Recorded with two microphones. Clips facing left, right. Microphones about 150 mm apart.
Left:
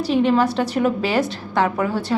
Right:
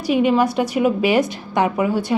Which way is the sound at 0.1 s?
10° right (ahead or behind).